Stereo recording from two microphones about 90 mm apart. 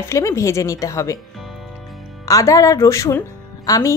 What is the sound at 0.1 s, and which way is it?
Speech, 35° left (ahead or behind).